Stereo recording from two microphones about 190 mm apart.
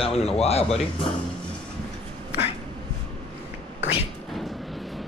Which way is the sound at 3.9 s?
Centre (ahead or behind).